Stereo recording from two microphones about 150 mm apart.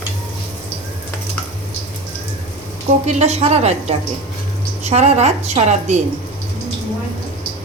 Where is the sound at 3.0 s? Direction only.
50° right (ahead or behind).